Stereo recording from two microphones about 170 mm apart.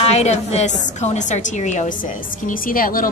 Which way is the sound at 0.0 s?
40° left (ahead or behind).